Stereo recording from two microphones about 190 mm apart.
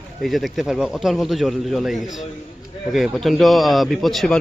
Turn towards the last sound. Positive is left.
turn(degrees=5)  # may be behind; listen again after turning